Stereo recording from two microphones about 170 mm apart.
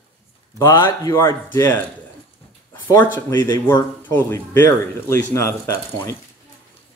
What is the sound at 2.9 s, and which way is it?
Speech, 15° left (ahead or behind).